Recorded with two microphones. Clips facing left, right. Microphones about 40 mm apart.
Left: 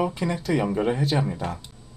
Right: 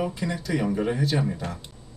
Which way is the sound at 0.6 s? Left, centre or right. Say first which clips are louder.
Left 2 dB; centre.